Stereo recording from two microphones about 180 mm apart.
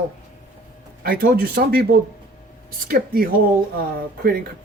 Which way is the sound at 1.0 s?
55° right (ahead or behind).